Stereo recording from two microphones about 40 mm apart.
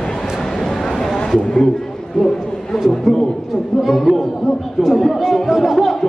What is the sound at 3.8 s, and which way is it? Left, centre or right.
Speech, centre.